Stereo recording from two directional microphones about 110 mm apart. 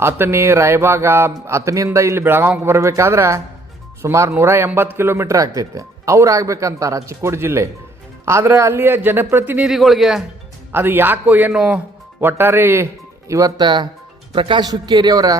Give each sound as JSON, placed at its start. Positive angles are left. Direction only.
{"t": 0.0, "sound": "a man's voice", "side_deg": -25}
{"t": 9.7, "sound": "speech", "side_deg": 0}
{"t": 10.7, "sound": "a man's voice", "side_deg": -20}
{"t": 12.2, "sound": "speech", "side_deg": -20}
{"t": 13.6, "sound": "a man's voice", "side_deg": -40}